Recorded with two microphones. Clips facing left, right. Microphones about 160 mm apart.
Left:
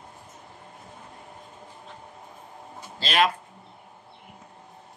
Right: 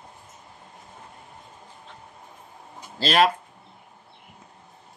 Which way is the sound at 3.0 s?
40° right (ahead or behind).